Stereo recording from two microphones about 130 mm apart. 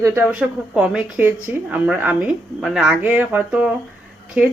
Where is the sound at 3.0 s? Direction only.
15° right (ahead or behind).